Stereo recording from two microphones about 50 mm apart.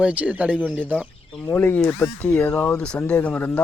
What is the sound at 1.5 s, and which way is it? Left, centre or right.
Speech, left.